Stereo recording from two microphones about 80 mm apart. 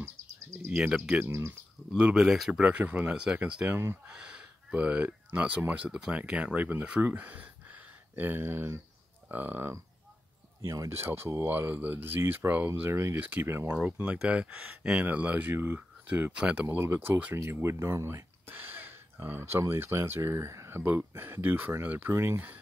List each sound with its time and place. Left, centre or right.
0.0 s bird: right
0.7 s speech: centre
1.2 s speech: right
2.0 s speech: centre
2.5 s speech: centre
3.7 s speech: right
4.1 s speech: centre
10.6 s speech: right
10.9 s speech: right
12.9 s speech: right
13.2 s speech: right
16.1 s speech: centre
16.6 s speech: right